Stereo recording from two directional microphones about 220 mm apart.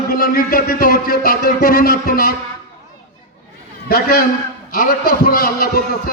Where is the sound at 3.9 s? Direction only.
45° left (ahead or behind).